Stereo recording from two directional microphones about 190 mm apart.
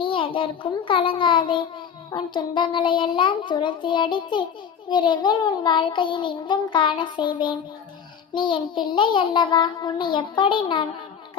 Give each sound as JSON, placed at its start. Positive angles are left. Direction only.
{"t": 0.0, "sound": "a child's voice", "side_deg": 25}